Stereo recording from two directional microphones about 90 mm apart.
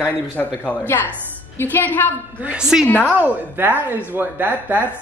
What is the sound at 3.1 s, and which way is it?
Speech, 20° right (ahead or behind).